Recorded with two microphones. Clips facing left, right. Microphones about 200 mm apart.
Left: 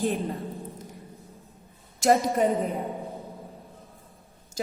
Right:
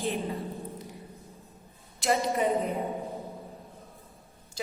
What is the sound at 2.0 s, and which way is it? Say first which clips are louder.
Speech: left 6 dB; 45° left (ahead or behind).